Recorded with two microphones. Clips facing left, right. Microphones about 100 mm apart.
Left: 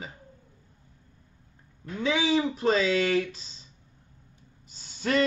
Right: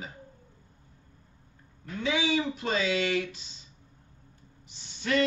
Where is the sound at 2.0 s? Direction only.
35° left (ahead or behind).